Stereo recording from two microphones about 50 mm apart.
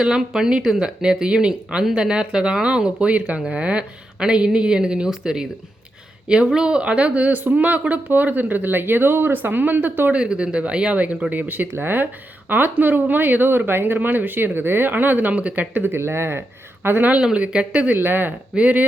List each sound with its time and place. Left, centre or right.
0.0 s speech: centre; by 10.1 s right
10.1 s speech: right
15.9 s speech: right
16.8 s speech: right
17.3 s speech: right
17.9 s speech: right
18.5 s speech: right